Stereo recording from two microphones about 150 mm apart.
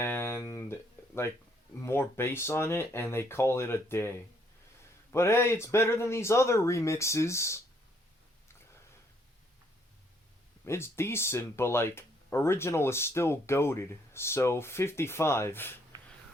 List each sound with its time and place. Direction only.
0.0 s a sound: 15° left (ahead or behind)
1.8 s speech: 15° left (ahead or behind)
5.1 s speech: 20° left (ahead or behind)
10.7 s speech: 15° left (ahead or behind)